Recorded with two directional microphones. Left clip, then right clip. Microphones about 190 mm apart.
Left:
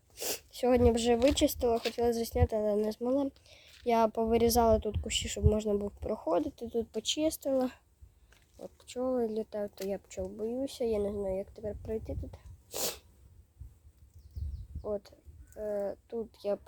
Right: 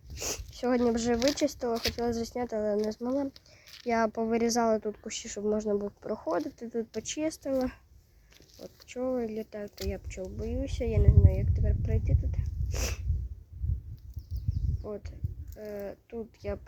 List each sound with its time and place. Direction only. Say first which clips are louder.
0.2 s speech: left 1 dB; 20° left (ahead or behind)
8.9 s speech: even; 15° left (ahead or behind)
14.8 s speech: left 4 dB; 15° left (ahead or behind)